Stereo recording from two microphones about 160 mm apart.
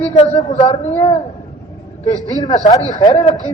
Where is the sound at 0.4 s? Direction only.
25° left (ahead or behind).